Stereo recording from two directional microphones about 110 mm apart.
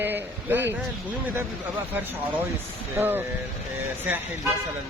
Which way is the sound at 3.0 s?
20° right (ahead or behind).